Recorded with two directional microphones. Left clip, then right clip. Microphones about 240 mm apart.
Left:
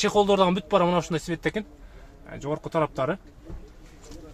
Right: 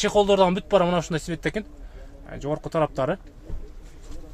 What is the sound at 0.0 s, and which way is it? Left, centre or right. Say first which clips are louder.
Speech: right 2 dB; centre.